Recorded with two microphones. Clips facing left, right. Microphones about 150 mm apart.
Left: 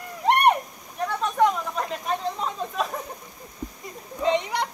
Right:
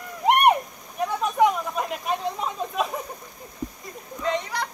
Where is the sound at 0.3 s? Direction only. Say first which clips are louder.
Right 1 dB; 10° right (ahead or behind).